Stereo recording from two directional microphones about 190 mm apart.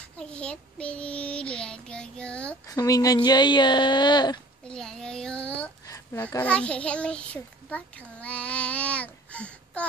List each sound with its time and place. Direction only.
0.2 s child singing: 5° left (ahead or behind)
2.6 s speech: 20° left (ahead or behind)
4.6 s a sound: 5° left (ahead or behind)
5.9 s a child's voice: 15° left (ahead or behind)